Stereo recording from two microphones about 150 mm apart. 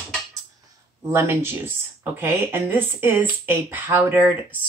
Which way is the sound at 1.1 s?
15° right (ahead or behind).